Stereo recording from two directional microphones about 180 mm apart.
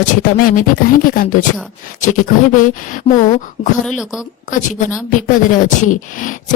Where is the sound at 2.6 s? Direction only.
45° left (ahead or behind).